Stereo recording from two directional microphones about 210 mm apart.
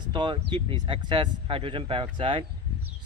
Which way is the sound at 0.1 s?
25° right (ahead or behind).